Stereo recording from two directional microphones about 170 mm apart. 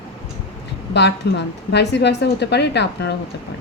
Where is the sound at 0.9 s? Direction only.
90° left.